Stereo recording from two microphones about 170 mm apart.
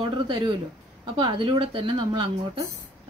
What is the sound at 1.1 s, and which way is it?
Speech, 30° right (ahead or behind).